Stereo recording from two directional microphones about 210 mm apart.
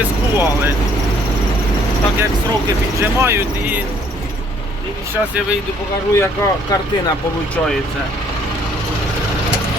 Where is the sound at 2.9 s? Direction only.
10° right (ahead or behind).